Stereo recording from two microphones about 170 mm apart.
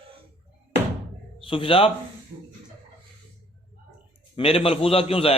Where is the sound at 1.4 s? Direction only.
30° left (ahead or behind).